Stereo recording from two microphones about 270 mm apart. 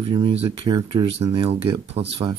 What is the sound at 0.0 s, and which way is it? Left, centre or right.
Speech, centre.